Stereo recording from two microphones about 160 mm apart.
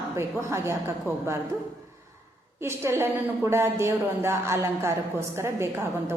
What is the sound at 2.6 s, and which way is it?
A woman's voice, 15° right (ahead or behind).